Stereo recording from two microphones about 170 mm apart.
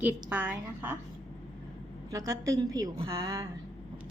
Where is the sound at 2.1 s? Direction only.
20° right (ahead or behind).